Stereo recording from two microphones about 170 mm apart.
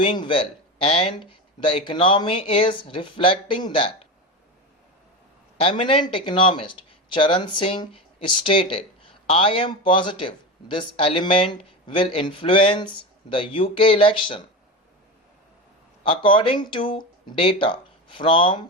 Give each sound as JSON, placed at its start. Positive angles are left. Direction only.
{"t": 0.0, "sound": "speech", "side_deg": 30}
{"t": 5.6, "sound": "speech", "side_deg": 35}
{"t": 16.0, "sound": "speech", "side_deg": 30}